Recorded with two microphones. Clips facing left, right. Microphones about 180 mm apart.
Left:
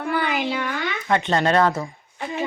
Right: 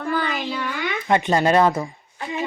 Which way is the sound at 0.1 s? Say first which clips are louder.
Left 1 dB; 20° left (ahead or behind).